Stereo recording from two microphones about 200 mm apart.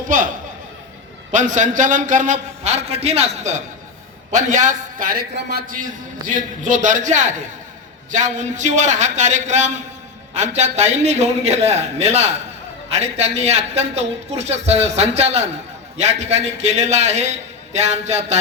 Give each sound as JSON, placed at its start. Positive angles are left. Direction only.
{"t": 0.1, "sound": "a man's voice", "side_deg": -40}